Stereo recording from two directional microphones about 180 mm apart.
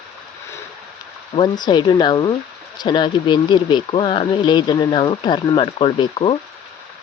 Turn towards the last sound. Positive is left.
turn(degrees=30)  # may be behind; listen again after turning